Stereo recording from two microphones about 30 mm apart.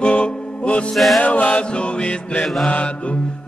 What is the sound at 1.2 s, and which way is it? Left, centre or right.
Chant, left.